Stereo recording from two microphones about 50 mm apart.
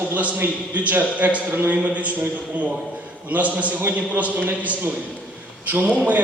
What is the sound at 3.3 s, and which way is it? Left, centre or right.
A man's voice, right.